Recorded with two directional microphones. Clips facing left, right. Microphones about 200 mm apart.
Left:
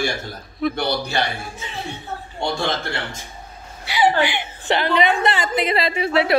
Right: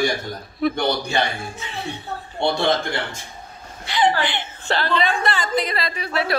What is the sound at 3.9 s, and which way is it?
A woman's voice, 10° left (ahead or behind).